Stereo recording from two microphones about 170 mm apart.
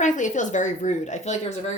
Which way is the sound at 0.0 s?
45° left (ahead or behind).